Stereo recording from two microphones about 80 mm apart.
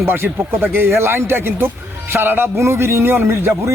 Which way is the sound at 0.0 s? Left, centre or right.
Right.